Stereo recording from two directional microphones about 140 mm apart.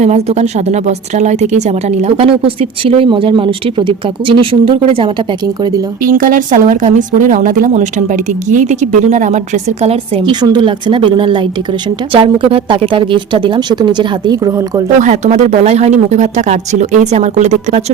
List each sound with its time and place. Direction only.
0.0 s a woman's voice: 50° right (ahead or behind)
6.0 s speech: 80° right; by 10.3 s 45° right (ahead or behind)
10.4 s speech: 35° right (ahead or behind)
15.0 s speech: 55° right (ahead or behind)